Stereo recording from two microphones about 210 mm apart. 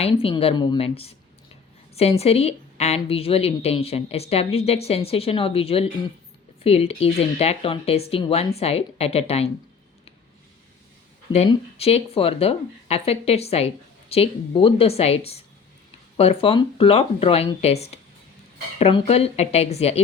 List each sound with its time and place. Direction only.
0.0 s speech: 25° left (ahead or behind)
11.3 s speech: 30° left (ahead or behind)